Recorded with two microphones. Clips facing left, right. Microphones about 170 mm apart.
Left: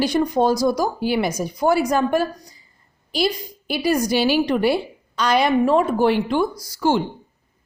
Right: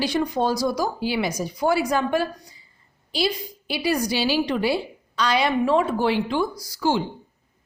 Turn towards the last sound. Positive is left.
turn(degrees=55)  # may be behind; listen again after turning